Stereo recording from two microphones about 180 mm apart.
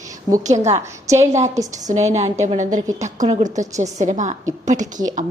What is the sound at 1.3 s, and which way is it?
A woman's voice, 40° right (ahead or behind).